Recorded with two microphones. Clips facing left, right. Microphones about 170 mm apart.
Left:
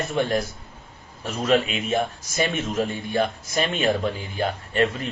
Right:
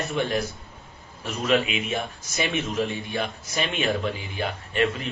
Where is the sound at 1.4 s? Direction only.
45° left (ahead or behind).